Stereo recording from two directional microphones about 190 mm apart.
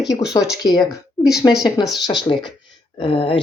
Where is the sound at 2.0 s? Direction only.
25° left (ahead or behind).